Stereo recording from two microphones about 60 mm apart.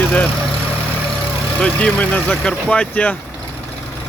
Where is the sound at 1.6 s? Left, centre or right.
Left.